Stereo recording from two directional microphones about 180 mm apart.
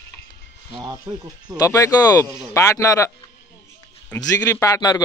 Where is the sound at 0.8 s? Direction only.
25° right (ahead or behind).